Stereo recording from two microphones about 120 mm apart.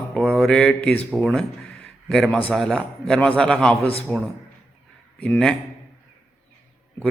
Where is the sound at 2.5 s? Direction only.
Centre (ahead or behind).